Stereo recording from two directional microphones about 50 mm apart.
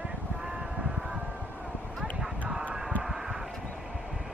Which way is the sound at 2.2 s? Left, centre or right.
Centre.